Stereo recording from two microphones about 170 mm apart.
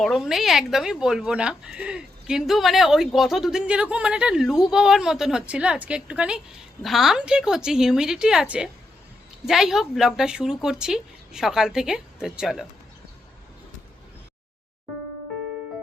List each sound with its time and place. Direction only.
0.0 s speech: centre (ahead or behind)